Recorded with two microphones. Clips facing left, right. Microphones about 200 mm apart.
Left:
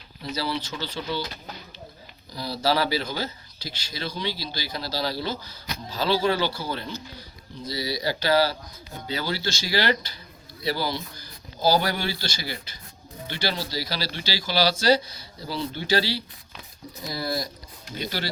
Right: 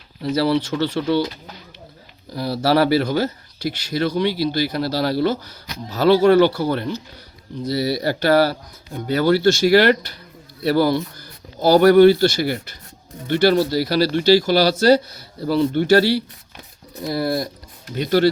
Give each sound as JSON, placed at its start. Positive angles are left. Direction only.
{"t": 0.7, "sound": "speech", "side_deg": -65}
{"t": 2.3, "sound": "speech", "side_deg": -60}